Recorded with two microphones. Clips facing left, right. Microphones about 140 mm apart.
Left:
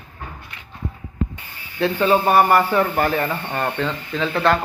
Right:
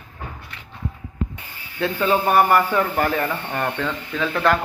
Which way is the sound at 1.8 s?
15° left (ahead or behind).